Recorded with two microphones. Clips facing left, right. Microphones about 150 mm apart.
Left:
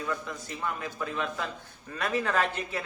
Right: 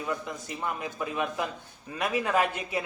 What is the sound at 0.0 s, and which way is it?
A man's voice, 20° right (ahead or behind).